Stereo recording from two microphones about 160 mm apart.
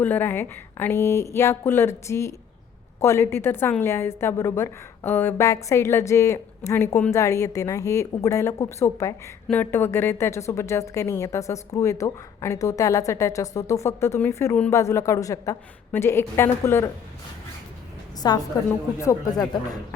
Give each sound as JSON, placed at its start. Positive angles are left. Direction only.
{"t": 0.0, "sound": "a woman's voice", "side_deg": 10}
{"t": 18.2, "sound": "speech", "side_deg": 25}